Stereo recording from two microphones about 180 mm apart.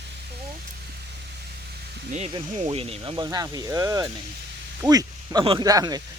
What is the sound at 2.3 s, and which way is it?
Speech, 35° right (ahead or behind).